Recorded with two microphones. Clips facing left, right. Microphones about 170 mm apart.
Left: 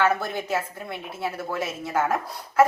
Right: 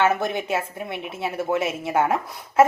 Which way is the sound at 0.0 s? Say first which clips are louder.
Right 2 dB; 25° right (ahead or behind).